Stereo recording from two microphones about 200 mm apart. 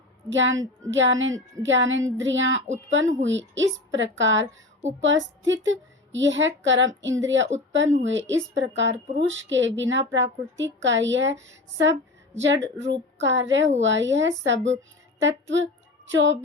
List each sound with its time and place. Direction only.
0.3 s a woman's voice: 70° right (ahead or behind)